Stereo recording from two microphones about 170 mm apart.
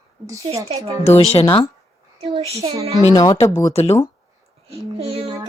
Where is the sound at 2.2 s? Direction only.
35° right (ahead or behind).